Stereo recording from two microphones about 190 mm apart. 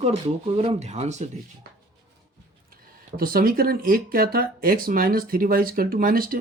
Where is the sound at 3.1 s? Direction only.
50° right (ahead or behind).